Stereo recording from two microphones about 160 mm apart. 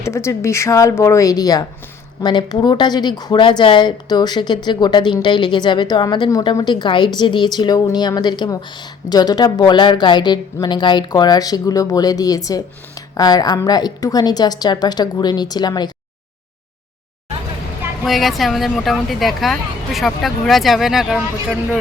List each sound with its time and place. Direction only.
0.0 s speech: 15° left (ahead or behind)
18.0 s speech: centre (ahead or behind)